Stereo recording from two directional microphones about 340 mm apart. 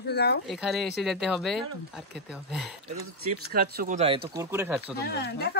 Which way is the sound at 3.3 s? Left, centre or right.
Right.